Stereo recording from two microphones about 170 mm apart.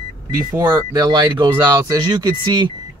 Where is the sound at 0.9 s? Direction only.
25° right (ahead or behind).